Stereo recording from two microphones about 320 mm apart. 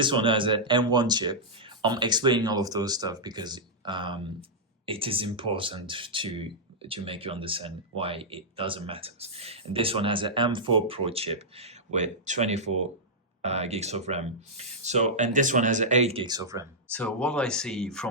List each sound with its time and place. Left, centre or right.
0.0 s speech: centre
16.9 s speech: centre